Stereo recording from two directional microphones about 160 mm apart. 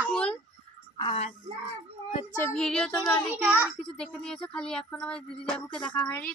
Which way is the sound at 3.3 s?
10° right (ahead or behind).